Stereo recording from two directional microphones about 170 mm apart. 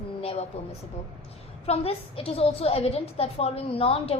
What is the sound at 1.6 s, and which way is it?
A woman's voice, 35° left (ahead or behind).